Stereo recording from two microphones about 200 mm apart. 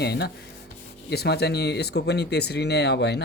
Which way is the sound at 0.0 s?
55° left (ahead or behind).